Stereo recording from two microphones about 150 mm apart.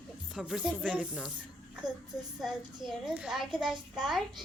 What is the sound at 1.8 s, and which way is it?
Speech, 30° right (ahead or behind).